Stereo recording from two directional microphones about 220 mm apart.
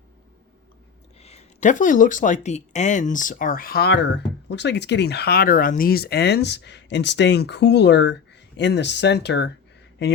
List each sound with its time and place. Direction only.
1.2 s speech: 30° left (ahead or behind); by 9.5 s 50° left (ahead or behind)